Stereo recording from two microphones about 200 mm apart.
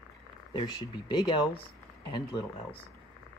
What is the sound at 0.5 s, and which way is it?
Speech, 20° left (ahead or behind).